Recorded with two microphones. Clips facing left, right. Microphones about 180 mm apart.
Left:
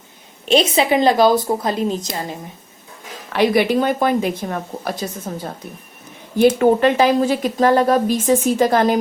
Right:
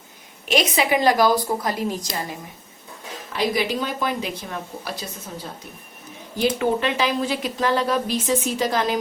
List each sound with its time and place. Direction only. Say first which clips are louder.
0.4 s a woman's voice: left 5 dB; 30° left (ahead or behind)
3.3 s speech: left 8 dB; 60° left (ahead or behind)